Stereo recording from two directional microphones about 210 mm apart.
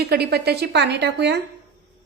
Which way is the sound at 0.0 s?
50° right (ahead or behind).